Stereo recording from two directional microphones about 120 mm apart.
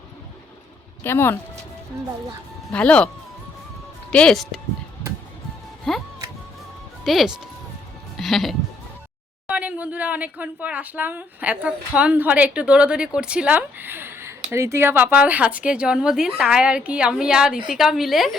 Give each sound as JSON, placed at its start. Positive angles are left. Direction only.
{"t": 1.0, "sound": "speech", "side_deg": 20}
{"t": 2.7, "sound": "speech", "side_deg": 10}
{"t": 4.1, "sound": "a woman's voice", "side_deg": 5}
{"t": 5.9, "sound": "music", "side_deg": 0}
{"t": 7.0, "sound": "speech", "side_deg": 0}
{"t": 9.5, "sound": "a woman's voice", "side_deg": -10}